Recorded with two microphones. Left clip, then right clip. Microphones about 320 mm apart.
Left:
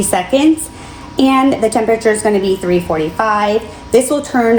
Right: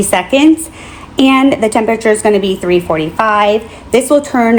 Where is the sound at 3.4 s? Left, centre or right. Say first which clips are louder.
Right 3 dB; right.